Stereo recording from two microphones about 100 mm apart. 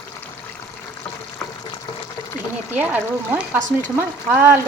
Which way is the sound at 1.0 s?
5° left (ahead or behind).